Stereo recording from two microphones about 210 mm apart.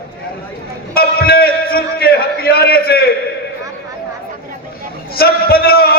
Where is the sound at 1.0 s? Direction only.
45° left (ahead or behind).